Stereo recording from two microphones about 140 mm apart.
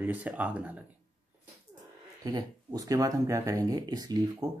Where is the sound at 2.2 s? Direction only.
25° right (ahead or behind).